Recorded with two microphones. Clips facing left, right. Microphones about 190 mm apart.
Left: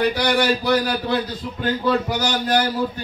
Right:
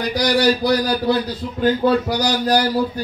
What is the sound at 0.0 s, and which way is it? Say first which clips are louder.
Speech: right 2 dB; 40° right (ahead or behind).